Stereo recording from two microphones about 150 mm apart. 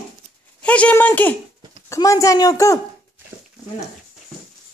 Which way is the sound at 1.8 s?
20° left (ahead or behind).